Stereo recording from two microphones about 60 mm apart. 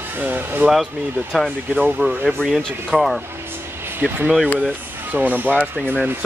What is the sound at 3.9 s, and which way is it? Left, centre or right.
Speech, right.